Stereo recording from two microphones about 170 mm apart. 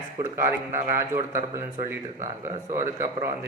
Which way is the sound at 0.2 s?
15° right (ahead or behind).